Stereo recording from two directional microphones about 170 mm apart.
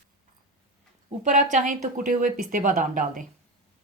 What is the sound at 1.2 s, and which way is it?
Speech, 50° right (ahead or behind).